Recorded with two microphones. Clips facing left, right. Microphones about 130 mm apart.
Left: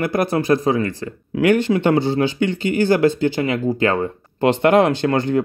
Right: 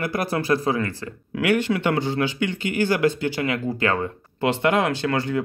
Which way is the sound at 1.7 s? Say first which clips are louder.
Left 6 dB; 35° left (ahead or behind).